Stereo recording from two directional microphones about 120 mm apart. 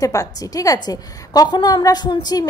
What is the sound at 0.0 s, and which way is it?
A woman's voice, 30° left (ahead or behind).